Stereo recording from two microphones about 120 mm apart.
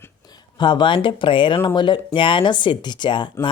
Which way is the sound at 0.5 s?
40° left (ahead or behind).